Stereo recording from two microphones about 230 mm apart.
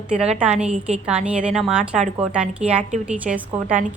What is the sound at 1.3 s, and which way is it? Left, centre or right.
A woman's voice, centre.